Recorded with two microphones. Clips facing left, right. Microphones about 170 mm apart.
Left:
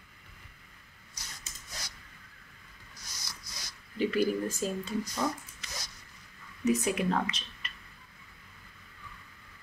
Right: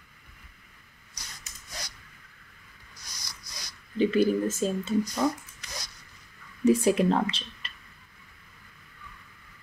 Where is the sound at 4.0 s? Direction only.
25° right (ahead or behind).